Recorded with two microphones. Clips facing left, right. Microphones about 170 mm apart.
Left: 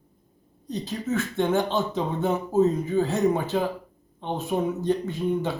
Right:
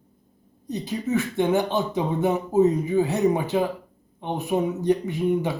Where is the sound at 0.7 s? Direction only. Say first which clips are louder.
Right 2 dB; 15° right (ahead or behind).